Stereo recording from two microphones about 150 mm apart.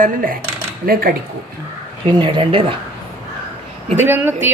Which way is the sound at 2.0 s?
35° right (ahead or behind).